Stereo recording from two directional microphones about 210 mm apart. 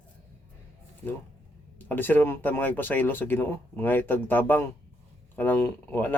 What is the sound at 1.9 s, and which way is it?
Speech, 10° left (ahead or behind).